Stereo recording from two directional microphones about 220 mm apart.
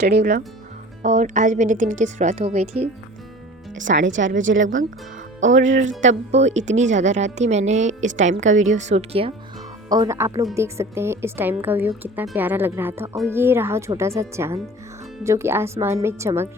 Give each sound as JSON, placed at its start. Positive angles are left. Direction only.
{"t": 0.0, "sound": "speech", "side_deg": -50}
{"t": 1.0, "sound": "speech", "side_deg": -35}
{"t": 3.9, "sound": "a woman's voice", "side_deg": -60}
{"t": 6.0, "sound": "speech", "side_deg": -30}
{"t": 9.9, "sound": "speech", "side_deg": -15}